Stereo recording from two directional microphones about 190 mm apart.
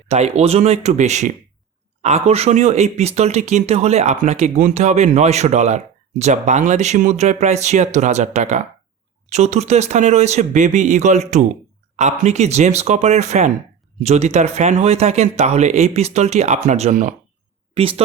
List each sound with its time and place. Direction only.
0.1 s speech: 35° right (ahead or behind)
17.7 s speech: 30° right (ahead or behind)